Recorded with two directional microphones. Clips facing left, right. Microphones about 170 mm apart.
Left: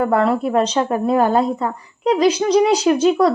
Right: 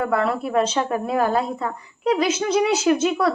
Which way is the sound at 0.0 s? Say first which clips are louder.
Left 5 dB; 35° left (ahead or behind).